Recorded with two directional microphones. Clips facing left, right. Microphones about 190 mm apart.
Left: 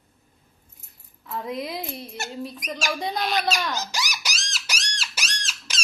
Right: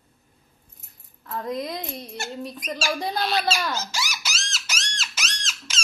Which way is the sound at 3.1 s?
15° left (ahead or behind).